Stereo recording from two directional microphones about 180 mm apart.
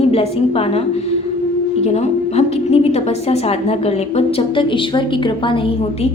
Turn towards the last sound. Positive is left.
turn(degrees=25)  # may be behind; listen again after turning